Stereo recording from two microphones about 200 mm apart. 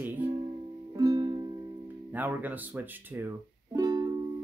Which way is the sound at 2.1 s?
10° right (ahead or behind).